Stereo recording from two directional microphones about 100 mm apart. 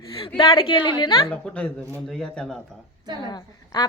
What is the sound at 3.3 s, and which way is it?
Speech, 45° left (ahead or behind).